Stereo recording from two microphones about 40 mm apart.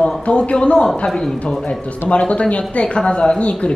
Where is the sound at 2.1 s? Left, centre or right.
Left.